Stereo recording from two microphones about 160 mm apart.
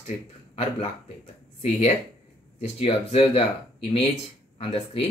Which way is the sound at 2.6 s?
40° left (ahead or behind).